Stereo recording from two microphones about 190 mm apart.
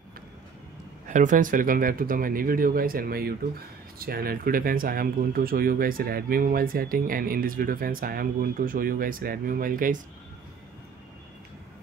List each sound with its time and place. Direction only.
1.0 s speech: 40° right (ahead or behind)